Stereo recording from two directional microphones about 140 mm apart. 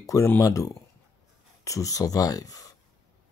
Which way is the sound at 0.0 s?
20° left (ahead or behind).